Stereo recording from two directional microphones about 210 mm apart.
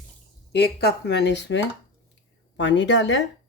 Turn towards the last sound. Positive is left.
turn(degrees=60)  # may be behind; listen again after turning